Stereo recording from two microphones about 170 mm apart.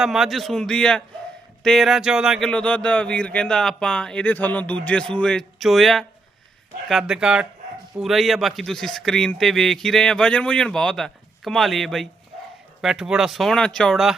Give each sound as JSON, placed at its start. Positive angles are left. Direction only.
{"t": 0.0, "sound": "speech", "side_deg": 0}